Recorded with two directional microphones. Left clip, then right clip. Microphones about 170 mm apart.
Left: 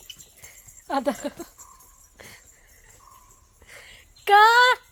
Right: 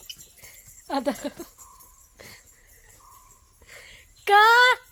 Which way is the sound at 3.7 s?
Centre (ahead or behind).